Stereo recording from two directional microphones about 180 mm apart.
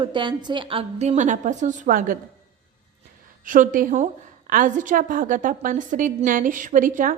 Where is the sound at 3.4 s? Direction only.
45° right (ahead or behind).